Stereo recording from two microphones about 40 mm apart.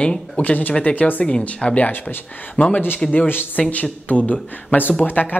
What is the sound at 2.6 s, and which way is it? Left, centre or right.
Speech, left.